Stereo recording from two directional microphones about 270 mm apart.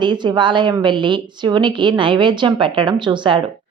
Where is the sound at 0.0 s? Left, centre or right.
Centre.